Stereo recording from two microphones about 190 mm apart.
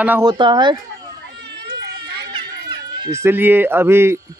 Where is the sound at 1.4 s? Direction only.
65° right (ahead or behind).